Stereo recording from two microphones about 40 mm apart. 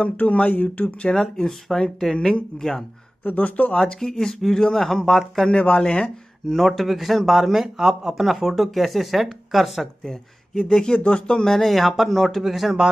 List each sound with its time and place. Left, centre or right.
0.2 s speech: left
1.1 s speech: centre
3.3 s speech: left
3.7 s speech: centre
5.5 s speech: left
6.4 s speech: centre
10.0 s speech: centre
11.4 s speech: centre